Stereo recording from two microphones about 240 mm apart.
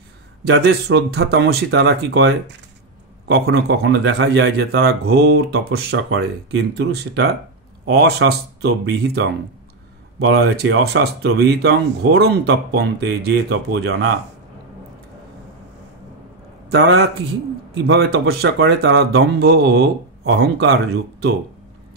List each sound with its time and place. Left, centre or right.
0.4 s a man's voice: right
16.6 s a man's voice: right